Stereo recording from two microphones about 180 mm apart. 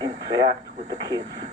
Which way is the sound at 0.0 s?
25° right (ahead or behind).